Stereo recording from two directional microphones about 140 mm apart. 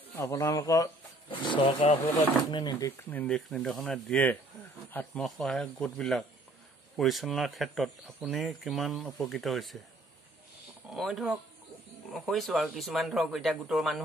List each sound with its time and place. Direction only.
0.1 s speech: 20° left (ahead or behind)
1.3 s speech: 35° left (ahead or behind)
1.7 s speech: 50° left (ahead or behind)
2.5 s speech: 30° left (ahead or behind)
3.0 s speech: 10° left (ahead or behind)
10.9 s speech: centre (ahead or behind)